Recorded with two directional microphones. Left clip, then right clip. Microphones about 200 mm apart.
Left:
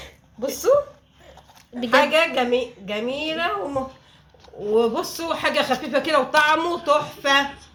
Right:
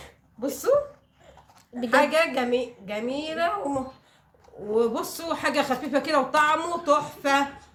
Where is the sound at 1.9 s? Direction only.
45° left (ahead or behind).